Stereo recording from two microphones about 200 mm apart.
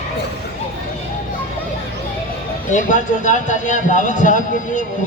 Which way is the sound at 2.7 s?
40° left (ahead or behind).